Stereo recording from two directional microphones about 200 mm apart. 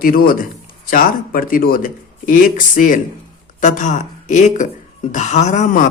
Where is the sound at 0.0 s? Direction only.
45° left (ahead or behind).